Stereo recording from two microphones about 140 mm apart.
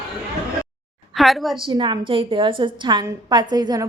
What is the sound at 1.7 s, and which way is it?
A woman's voice, 35° right (ahead or behind).